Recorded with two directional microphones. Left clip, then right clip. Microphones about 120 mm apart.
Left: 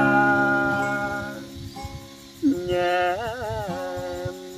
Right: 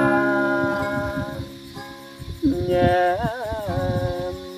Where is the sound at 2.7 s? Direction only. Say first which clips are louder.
Right 5 dB; 35° left (ahead or behind).